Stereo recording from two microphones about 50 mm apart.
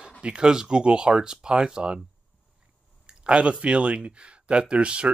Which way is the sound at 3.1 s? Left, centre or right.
Right.